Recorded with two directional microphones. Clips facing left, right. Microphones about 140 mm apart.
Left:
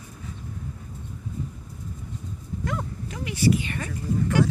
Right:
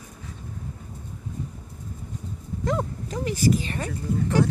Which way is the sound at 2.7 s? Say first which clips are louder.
Right 6 dB; 35° right (ahead or behind).